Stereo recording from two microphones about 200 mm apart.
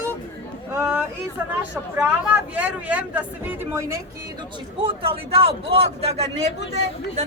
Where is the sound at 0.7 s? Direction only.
10° right (ahead or behind).